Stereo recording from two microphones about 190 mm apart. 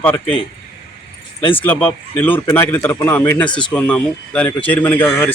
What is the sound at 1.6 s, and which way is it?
A man's voice, 10° left (ahead or behind).